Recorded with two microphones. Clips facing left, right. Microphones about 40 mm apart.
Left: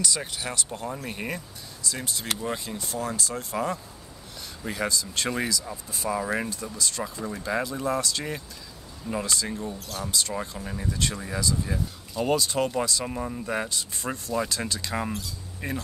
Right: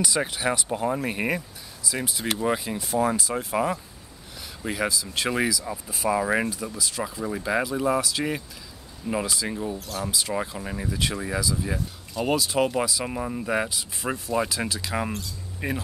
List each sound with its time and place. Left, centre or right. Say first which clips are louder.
0.3 s speech: right 6 dB; centre
1.3 s speech: right 5 dB; centre
6.5 s speech: right 1 dB; centre
9.8 s speech: right 1 dB; centre
12.5 s speech: right 2 dB; centre